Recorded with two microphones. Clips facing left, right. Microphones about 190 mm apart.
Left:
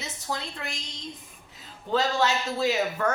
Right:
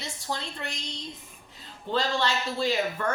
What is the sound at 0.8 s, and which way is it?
Speech, 35° right (ahead or behind).